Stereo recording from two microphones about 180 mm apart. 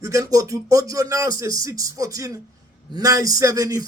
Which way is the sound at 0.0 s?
20° right (ahead or behind).